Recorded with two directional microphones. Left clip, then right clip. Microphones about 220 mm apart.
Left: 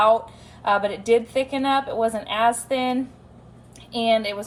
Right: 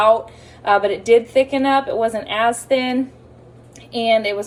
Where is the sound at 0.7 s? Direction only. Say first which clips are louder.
Right 6 dB; 50° left (ahead or behind).